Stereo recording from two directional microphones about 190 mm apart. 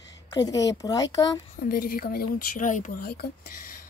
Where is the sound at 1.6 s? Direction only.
50° left (ahead or behind).